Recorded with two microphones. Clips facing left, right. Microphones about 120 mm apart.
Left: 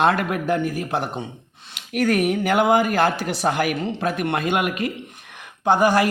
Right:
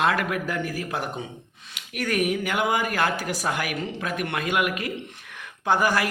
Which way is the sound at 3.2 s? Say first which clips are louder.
Left 3 dB; 80° left.